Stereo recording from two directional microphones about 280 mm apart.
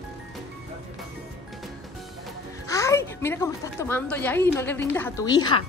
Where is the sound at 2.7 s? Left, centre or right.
Centre.